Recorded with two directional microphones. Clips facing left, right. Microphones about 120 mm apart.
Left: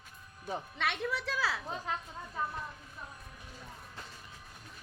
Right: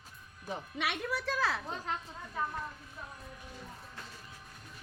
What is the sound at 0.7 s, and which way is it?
Speech, 10° right (ahead or behind).